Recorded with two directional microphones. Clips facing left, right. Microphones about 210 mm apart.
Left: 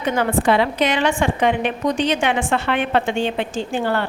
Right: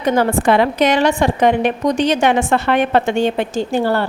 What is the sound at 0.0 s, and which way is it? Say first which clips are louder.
A woman's voice: right 4 dB; 40° right (ahead or behind).